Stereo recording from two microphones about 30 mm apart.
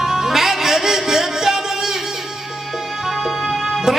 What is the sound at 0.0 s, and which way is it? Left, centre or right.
Music, centre.